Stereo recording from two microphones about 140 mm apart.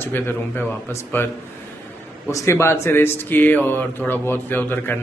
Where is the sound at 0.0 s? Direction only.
15° left (ahead or behind).